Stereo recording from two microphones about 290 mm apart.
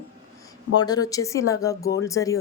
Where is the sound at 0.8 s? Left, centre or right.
Centre.